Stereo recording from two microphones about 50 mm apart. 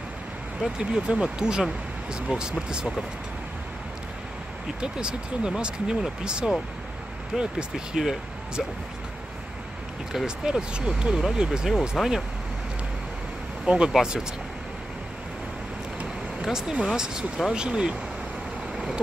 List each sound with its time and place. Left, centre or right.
0.7 s speech: centre
4.7 s speech: centre
10.1 s speech: centre
12.0 s speech: centre
13.7 s speech: right
16.3 s speech: centre